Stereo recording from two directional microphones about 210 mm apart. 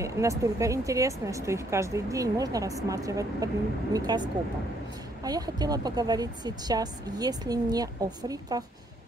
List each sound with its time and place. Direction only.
0.0 s speech: 15° right (ahead or behind)